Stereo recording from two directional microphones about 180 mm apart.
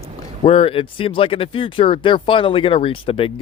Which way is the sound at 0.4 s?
30° left (ahead or behind).